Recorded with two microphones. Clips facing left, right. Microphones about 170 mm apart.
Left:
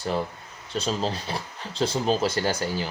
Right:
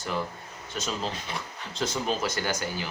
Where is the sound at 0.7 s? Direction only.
30° left (ahead or behind).